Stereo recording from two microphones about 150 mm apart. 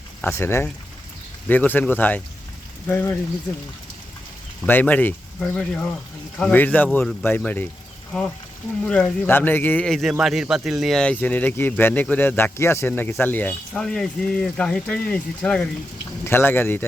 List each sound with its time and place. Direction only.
0.2 s speech: 15° left (ahead or behind)
4.6 s speech: 10° left (ahead or behind)